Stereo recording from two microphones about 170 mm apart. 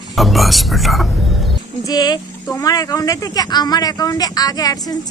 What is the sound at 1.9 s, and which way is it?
A woman's voice, 25° left (ahead or behind).